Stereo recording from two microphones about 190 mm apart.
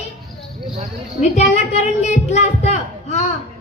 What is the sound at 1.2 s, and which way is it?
A woman's voice, 35° left (ahead or behind).